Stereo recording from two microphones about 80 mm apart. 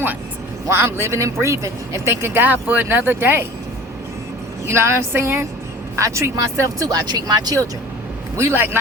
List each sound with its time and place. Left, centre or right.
0.7 s speech: right
4.6 s speech: right
8.4 s a man's voice: right